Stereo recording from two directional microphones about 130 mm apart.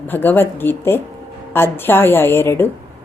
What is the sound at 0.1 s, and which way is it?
Speech, 15° left (ahead or behind).